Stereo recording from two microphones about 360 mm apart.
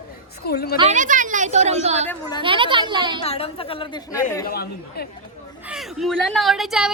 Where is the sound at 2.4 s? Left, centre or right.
Centre.